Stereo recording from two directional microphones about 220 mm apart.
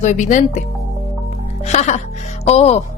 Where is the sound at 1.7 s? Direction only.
30° left (ahead or behind).